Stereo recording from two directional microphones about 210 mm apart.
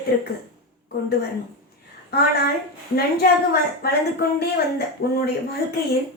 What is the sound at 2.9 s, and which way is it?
Speech, 45° left (ahead or behind).